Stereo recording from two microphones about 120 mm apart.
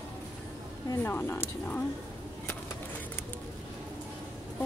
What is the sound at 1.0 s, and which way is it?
Speech, 20° left (ahead or behind).